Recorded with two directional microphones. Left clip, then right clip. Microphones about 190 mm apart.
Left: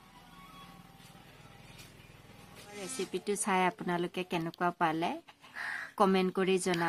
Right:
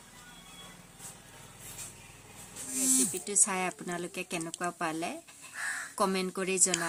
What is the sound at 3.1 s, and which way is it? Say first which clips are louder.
Speech: even; 45° left (ahead or behind).